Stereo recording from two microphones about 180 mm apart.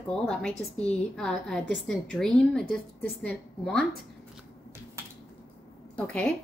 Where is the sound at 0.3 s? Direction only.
5° left (ahead or behind).